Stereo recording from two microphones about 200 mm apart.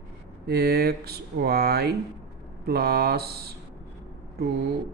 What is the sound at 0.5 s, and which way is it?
Speech, 50° right (ahead or behind).